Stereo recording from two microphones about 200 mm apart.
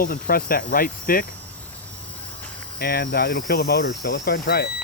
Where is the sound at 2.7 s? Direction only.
50° left (ahead or behind).